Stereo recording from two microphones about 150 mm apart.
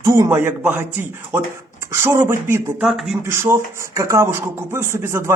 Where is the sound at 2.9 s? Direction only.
Centre (ahead or behind).